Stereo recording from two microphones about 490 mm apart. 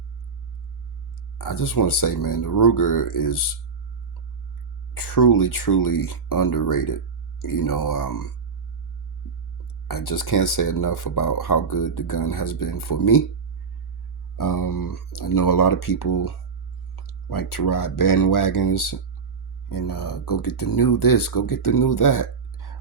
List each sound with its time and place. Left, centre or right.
1.4 s speech: left
4.9 s speech: left
9.8 s speech: left
14.3 s speech: left